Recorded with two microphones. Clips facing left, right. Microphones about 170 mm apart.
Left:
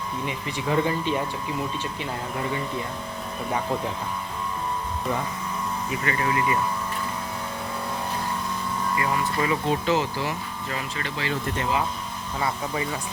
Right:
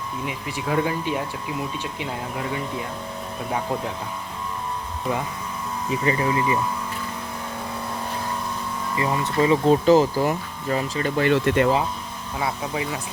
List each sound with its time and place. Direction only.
0.3 s speech: 5° right (ahead or behind)
2.4 s speech: 5° right (ahead or behind)
5.9 s speech: 25° right (ahead or behind)
9.0 s speech: 25° right (ahead or behind)
11.2 s speech: 65° right (ahead or behind)
12.4 s speech: 5° right (ahead or behind)